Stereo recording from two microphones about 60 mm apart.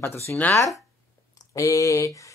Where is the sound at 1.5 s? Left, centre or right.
Left.